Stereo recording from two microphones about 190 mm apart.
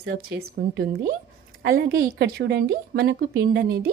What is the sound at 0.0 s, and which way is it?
A woman's voice, 65° right (ahead or behind).